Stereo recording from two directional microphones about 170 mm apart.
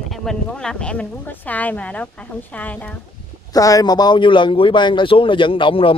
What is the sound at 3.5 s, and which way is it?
A man's voice, 20° left (ahead or behind).